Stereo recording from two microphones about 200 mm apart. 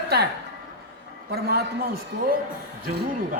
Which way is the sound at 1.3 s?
55° right (ahead or behind).